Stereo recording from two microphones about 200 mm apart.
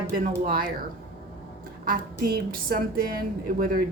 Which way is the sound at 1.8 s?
45° right (ahead or behind).